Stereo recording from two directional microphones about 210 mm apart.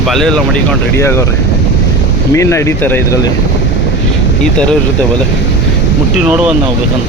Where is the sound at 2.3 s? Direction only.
15° left (ahead or behind).